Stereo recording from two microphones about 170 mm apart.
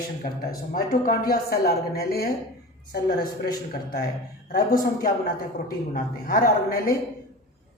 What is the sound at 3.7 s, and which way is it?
Speech, 65° left (ahead or behind).